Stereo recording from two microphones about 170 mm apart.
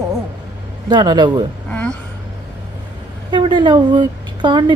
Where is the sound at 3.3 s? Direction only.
25° right (ahead or behind).